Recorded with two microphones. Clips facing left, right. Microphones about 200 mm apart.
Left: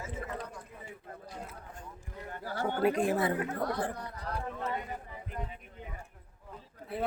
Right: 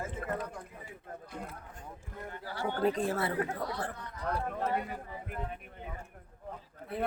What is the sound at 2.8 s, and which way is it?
Speech, 10° left (ahead or behind).